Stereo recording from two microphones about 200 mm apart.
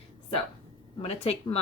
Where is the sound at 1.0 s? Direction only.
30° left (ahead or behind).